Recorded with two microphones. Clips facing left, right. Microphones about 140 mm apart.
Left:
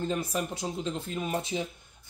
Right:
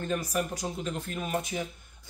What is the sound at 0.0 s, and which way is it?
Speech, 20° left (ahead or behind).